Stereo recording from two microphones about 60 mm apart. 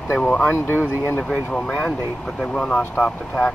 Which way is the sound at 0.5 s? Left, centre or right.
Left.